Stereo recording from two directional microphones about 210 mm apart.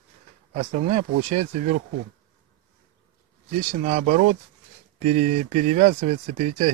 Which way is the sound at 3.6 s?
30° right (ahead or behind).